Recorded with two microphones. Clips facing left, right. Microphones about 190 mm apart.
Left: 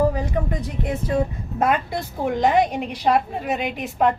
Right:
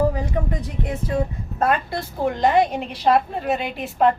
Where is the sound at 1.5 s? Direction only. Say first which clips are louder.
Even; 15° left (ahead or behind).